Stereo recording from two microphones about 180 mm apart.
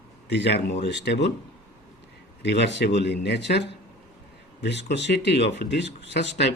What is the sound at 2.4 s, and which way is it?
A man's voice, 75° left (ahead or behind).